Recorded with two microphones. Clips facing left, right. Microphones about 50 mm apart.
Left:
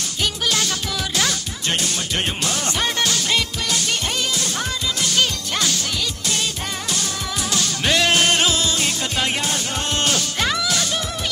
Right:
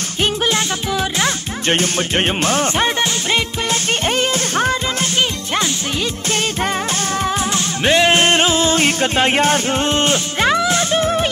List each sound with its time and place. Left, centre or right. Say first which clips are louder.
1.2 s music: right 5 dB; right
4.2 s music: right 7 dB; right
7.5 s music: right 3 dB; right